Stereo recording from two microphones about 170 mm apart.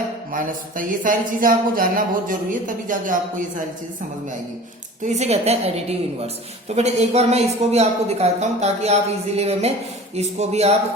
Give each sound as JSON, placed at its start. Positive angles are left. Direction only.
{"t": 0.3, "sound": "speech", "side_deg": -55}
{"t": 5.0, "sound": "a woman's voice", "side_deg": -40}